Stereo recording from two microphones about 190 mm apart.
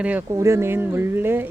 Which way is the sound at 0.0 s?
10° right (ahead or behind).